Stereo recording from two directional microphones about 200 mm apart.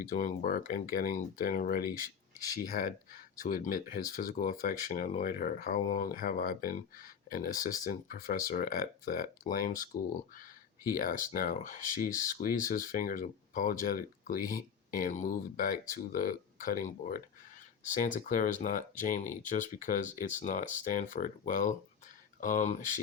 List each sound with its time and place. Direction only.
0.0 s speech: 40° left (ahead or behind)
10.8 s speech: 45° left (ahead or behind)